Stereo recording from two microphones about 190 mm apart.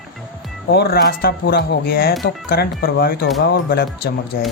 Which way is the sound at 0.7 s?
55° left (ahead or behind).